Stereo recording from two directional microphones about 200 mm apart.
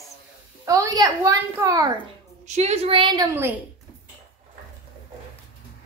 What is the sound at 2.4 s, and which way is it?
A woman's voice, 35° right (ahead or behind).